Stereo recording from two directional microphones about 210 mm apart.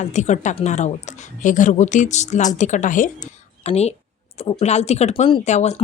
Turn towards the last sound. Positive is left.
turn(degrees=30)  # may be behind; listen again after turning